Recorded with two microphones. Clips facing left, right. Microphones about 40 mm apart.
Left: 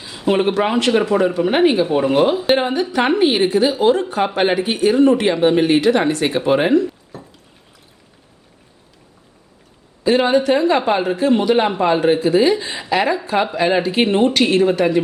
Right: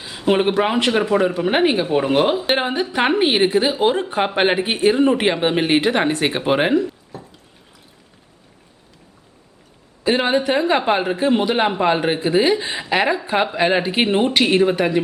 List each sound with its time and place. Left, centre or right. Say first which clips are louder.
0.0 s speech: even; centre
6.8 s a sound: left 3 dB; centre
10.2 s speech: left 3 dB; centre